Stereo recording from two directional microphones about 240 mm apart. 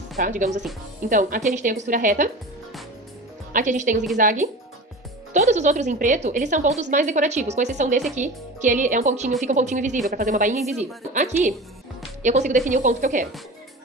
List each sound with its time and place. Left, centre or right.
0.2 s speech: right
3.5 s speech: right